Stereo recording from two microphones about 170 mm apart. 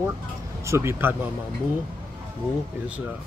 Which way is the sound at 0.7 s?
15° right (ahead or behind).